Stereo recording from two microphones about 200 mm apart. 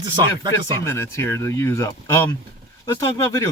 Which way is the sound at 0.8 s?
10° left (ahead or behind).